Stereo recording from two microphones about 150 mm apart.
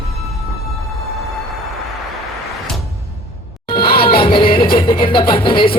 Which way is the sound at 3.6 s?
30° left (ahead or behind).